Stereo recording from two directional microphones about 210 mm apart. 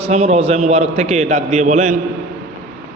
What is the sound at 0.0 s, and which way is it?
A man's voice, 30° right (ahead or behind).